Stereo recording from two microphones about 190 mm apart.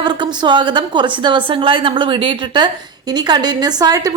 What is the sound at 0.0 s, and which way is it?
A woman's voice, 25° right (ahead or behind).